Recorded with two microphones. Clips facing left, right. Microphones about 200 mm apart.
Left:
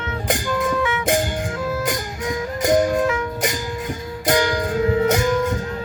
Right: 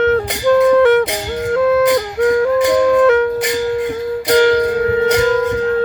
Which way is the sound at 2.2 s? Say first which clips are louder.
Right 13 dB; 60° right (ahead or behind).